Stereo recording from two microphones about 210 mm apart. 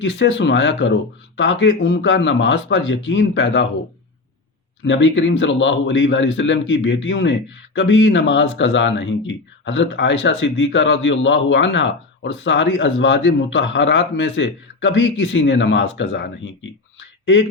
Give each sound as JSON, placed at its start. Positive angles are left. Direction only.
{"t": 0.0, "sound": "a man's voice", "side_deg": 60}
{"t": 4.9, "sound": "a man's voice", "side_deg": 60}